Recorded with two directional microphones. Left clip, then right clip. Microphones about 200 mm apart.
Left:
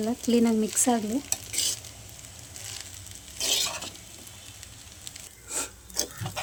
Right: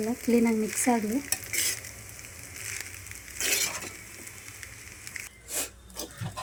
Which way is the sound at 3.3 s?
15° left (ahead or behind).